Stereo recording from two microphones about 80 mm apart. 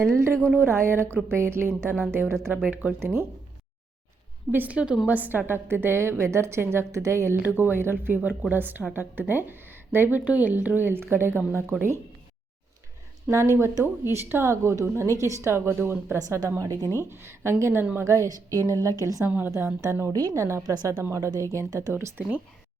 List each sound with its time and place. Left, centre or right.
0.0 s a woman's voice: right
4.5 s a woman's voice: centre; by 7.3 s right
7.4 s a woman's voice: right
13.2 s a woman's voice: right
16.1 s a woman's voice: right
19.2 s a woman's voice: right
20.9 s a woman's voice: right
21.9 s a woman's voice: right